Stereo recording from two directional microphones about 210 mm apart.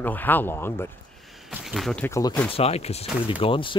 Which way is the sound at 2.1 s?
15° left (ahead or behind).